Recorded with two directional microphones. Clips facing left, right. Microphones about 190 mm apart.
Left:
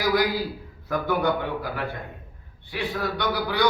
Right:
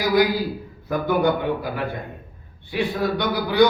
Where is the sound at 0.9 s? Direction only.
15° right (ahead or behind).